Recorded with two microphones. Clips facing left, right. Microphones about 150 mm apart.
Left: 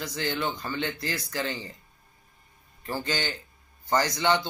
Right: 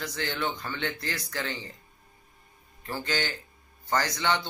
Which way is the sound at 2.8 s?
15° left (ahead or behind).